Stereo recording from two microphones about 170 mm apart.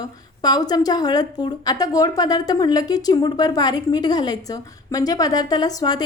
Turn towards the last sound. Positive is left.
turn(degrees=20)  # may be behind; listen again after turning